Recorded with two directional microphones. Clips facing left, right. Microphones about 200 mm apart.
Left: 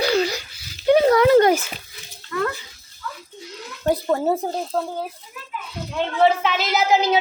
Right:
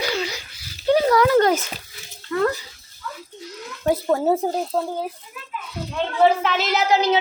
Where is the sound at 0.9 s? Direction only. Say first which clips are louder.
Left 3 dB; 25° left (ahead or behind).